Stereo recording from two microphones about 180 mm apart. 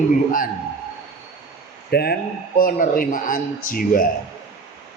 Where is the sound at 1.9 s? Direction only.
60° left (ahead or behind).